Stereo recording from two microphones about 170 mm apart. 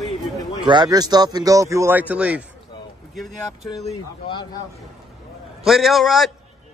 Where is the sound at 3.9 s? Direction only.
25° left (ahead or behind).